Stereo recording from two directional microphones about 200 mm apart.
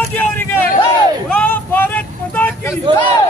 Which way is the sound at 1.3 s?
10° left (ahead or behind).